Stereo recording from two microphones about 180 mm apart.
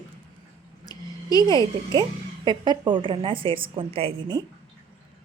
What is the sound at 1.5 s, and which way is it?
Speech, 25° right (ahead or behind).